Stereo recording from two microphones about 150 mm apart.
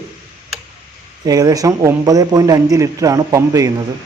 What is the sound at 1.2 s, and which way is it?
Speech, 25° right (ahead or behind).